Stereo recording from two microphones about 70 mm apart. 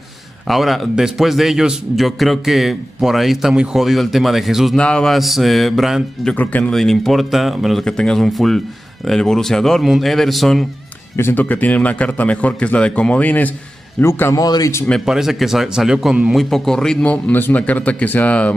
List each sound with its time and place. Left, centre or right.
0.5 s a man's voice: centre
4.7 s a man's voice: centre
5.1 s a man's voice: centre
6.3 s a man's voice: left
6.7 s a man's voice: centre
7.8 s a man's voice: centre
11.3 s a man's voice: left
14.0 s a man's voice: left
14.3 s speech: left
15.0 s a man's voice: centre
16.3 s a man's voice: centre
17.0 s a man's voice: left